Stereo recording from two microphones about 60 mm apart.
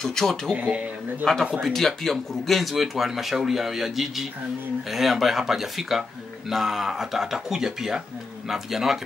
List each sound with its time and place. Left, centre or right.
0.0 s speech: centre
0.6 s speech: right
1.2 s speech: centre